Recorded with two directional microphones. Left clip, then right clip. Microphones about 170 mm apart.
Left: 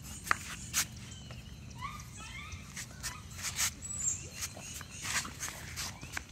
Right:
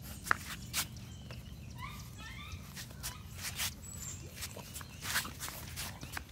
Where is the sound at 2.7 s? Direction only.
15° left (ahead or behind).